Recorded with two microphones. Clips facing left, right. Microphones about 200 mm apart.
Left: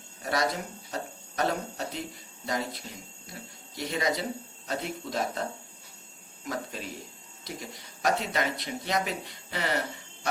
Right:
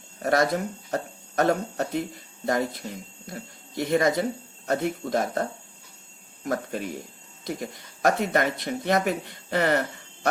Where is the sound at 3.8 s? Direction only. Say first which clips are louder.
Right 7 dB; 55° right (ahead or behind).